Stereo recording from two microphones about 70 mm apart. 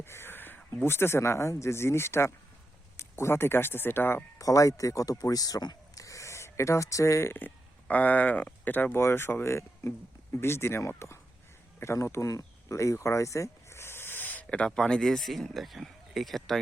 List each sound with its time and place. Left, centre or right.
0.0 s speech: left
4.4 s speech: left
11.8 s a sound: left
14.8 s speech: centre